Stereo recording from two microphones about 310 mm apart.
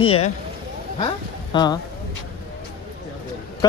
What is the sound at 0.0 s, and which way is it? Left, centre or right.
Speech, centre.